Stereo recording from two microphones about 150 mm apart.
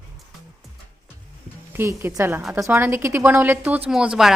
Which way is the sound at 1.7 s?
15° right (ahead or behind).